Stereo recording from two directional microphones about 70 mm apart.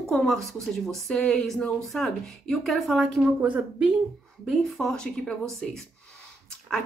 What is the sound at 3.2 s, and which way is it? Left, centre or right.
Speech, centre.